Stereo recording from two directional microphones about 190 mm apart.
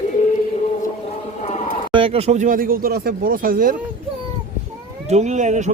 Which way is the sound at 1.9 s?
30° right (ahead or behind).